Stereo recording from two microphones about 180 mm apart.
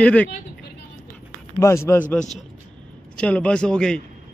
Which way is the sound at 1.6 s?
15° left (ahead or behind).